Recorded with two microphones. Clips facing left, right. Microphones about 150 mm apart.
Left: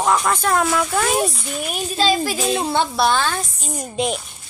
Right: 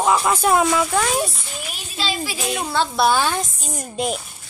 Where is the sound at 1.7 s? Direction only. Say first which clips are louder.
Left 8 dB; 45° left (ahead or behind).